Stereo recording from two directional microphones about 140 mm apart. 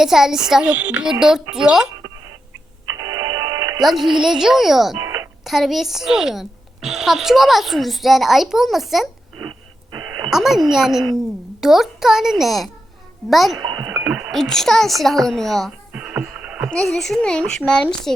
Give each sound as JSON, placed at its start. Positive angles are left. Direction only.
{"t": 0.0, "sound": "a woman's voice", "side_deg": -5}
{"t": 2.8, "sound": "music", "side_deg": -25}
{"t": 3.8, "sound": "a woman's voice", "side_deg": 0}
{"t": 5.0, "sound": "a sound", "side_deg": -15}
{"t": 5.5, "sound": "a woman's voice", "side_deg": 0}
{"t": 10.2, "sound": "a woman's voice", "side_deg": -5}
{"t": 15.9, "sound": "music", "side_deg": -10}
{"t": 16.7, "sound": "a woman's voice", "side_deg": 0}